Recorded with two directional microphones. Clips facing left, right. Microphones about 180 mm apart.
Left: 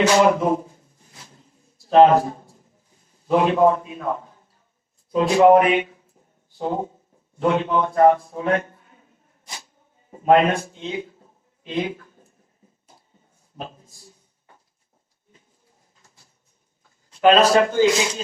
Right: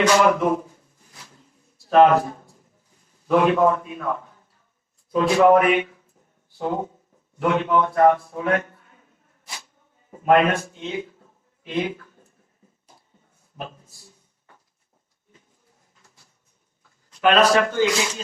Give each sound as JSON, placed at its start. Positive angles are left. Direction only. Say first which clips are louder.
{"t": 0.0, "sound": "a sound", "louder": "left 1 dB", "side_deg": 30}
{"t": 1.9, "sound": "a man's voice", "louder": "left 2 dB", "side_deg": 30}
{"t": 5.4, "sound": "a man's voice", "louder": "left 2 dB", "side_deg": 30}
{"t": 10.1, "sound": "speech", "louder": "left 1 dB", "side_deg": 30}
{"t": 11.8, "sound": "a sound", "louder": "even", "side_deg": 25}
{"t": 17.1, "sound": "a man's voice", "louder": "left 2 dB", "side_deg": 30}